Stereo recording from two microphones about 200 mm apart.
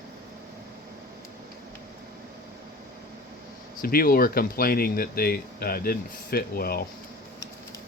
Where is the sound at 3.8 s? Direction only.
45° left (ahead or behind).